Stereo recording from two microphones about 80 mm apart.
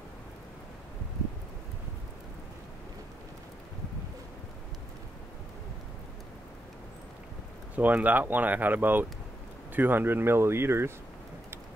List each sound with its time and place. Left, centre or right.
7.7 s speech: centre